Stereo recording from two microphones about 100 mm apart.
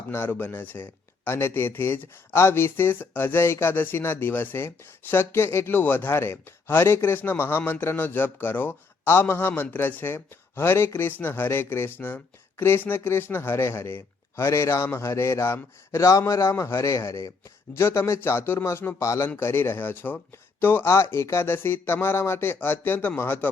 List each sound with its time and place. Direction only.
0.1 s a man's voice: 20° left (ahead or behind)